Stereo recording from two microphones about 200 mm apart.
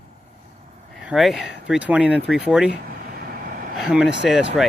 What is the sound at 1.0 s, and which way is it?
Speech, centre (ahead or behind).